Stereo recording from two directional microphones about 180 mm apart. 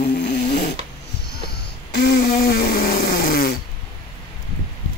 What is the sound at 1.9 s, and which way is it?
Snoring, 65° left (ahead or behind).